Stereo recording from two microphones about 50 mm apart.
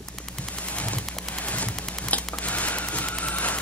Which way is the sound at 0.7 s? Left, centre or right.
Left.